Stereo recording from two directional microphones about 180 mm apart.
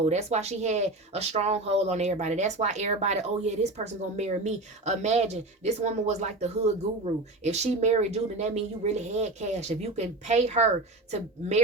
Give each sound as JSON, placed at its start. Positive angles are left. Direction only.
{"t": 0.0, "sound": "speech", "side_deg": -40}